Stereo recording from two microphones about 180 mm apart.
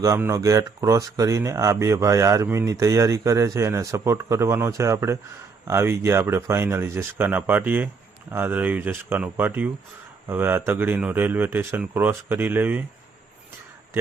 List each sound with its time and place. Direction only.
0.0 s speech: 15° right (ahead or behind)